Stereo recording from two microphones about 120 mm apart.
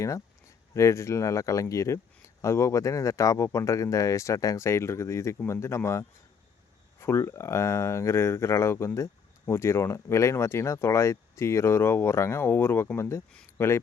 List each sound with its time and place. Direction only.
0.7 s speech: 25° left (ahead or behind)